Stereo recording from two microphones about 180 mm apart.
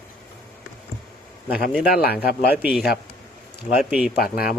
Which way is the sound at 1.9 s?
55° left (ahead or behind).